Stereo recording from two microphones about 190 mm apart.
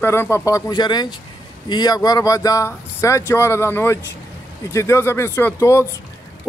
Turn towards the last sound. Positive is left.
turn(degrees=15)  # may be behind; listen again after turning